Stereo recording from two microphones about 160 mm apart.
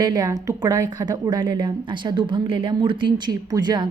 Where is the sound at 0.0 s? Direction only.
25° right (ahead or behind).